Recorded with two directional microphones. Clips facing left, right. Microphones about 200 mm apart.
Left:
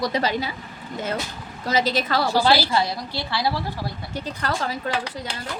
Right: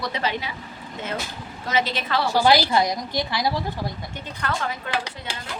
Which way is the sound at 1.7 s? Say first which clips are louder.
Left 2 dB; 40° left (ahead or behind).